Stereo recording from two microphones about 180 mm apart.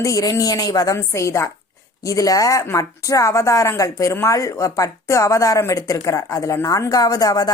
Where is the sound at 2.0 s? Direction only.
20° left (ahead or behind).